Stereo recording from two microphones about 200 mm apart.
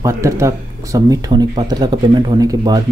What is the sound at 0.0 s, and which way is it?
Speech, 15° right (ahead or behind).